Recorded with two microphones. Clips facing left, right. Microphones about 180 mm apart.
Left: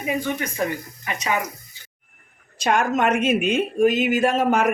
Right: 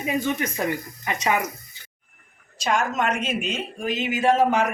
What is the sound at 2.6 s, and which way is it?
Speech, 55° left (ahead or behind).